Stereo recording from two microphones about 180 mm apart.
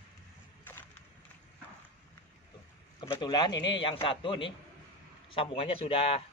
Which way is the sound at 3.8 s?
30° left (ahead or behind).